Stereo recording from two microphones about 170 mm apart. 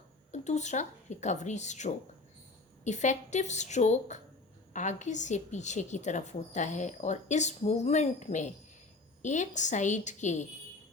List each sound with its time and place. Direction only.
0.3 s a woman's voice: 45° left (ahead or behind)